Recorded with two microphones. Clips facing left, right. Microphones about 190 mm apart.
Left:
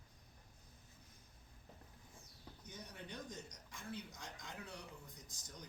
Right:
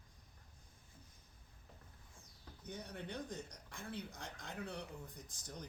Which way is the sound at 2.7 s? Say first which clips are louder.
Right 6 dB; 60° right (ahead or behind).